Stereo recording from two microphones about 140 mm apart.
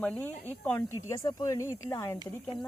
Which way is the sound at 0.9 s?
20° left (ahead or behind).